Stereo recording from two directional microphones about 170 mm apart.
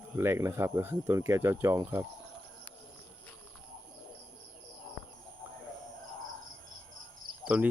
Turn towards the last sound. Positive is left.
turn(degrees=-5)  # may be behind; listen again after turning